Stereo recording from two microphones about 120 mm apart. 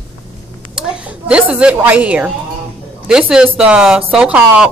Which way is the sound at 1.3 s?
10° right (ahead or behind).